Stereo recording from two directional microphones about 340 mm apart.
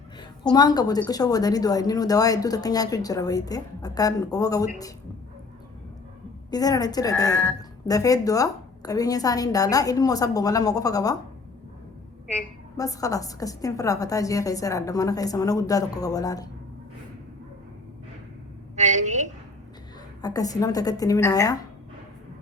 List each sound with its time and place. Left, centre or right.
0.4 s a woman's voice: centre
6.5 s a woman's voice: centre
12.3 s a woman's voice: centre
18.8 s a woman's voice: right
20.2 s a woman's voice: centre